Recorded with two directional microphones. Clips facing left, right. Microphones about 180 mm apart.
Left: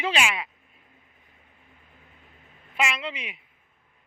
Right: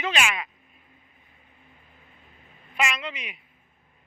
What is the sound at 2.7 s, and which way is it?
Speech, 25° left (ahead or behind).